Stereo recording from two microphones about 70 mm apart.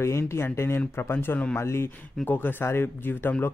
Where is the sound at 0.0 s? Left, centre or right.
Left.